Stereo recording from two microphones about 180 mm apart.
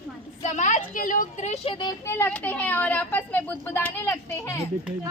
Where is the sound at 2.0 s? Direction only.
15° left (ahead or behind).